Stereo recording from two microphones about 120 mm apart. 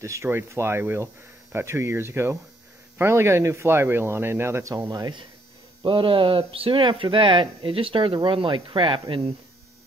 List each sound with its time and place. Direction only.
0.0 s speech: 25° right (ahead or behind); by 9.3 s 45° right (ahead or behind)